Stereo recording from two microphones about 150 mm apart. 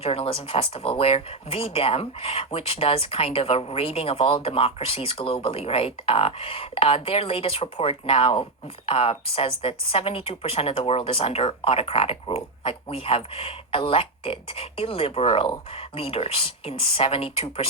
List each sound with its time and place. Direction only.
0.0 s a woman's voice: 40° left (ahead or behind)